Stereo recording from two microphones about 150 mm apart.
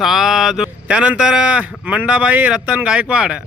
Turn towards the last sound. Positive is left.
turn(degrees=-5)  # may be behind; listen again after turning